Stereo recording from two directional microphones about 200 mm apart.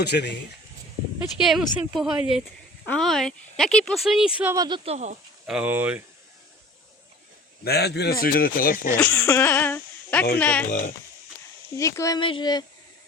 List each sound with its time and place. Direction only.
0.0 s speech: 55° left (ahead or behind)
1.4 s a woman's voice: centre (ahead or behind); by 4.8 s 20° right (ahead or behind)
4.9 s speech: 35° right (ahead or behind)
5.5 s speech: 5° right (ahead or behind)
7.6 s speech: 55° left (ahead or behind)
9.0 s speech: 10° left (ahead or behind)
10.7 s speech: 40° left (ahead or behind)
11.8 s speech: 15° left (ahead or behind)